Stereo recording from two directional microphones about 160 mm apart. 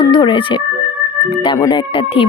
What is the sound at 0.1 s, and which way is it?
Speech, 30° left (ahead or behind).